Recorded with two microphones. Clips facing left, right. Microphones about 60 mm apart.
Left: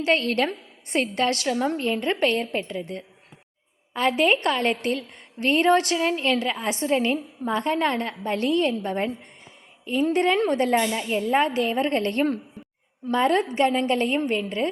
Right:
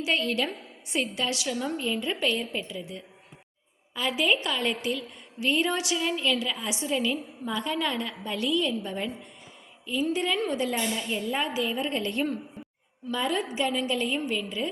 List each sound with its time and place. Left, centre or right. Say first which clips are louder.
0.0 s a woman's voice: left 5 dB; left
11.4 s a woman's voice: left 6 dB; left